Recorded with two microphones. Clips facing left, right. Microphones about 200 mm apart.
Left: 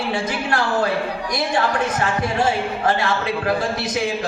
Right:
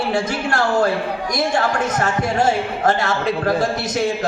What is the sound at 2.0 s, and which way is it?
Speech, 45° right (ahead or behind).